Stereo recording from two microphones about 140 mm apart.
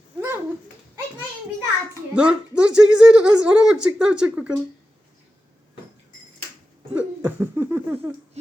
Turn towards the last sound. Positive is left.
turn(degrees=-15)  # may be behind; listen again after turning